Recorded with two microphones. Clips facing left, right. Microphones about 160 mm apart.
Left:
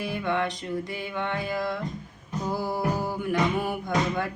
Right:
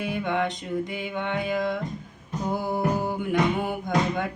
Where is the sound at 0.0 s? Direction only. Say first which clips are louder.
Right 1 dB; 20° right (ahead or behind).